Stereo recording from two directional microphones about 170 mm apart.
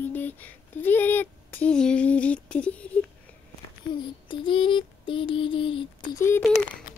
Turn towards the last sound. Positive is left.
turn(degrees=15)  # may be behind; listen again after turning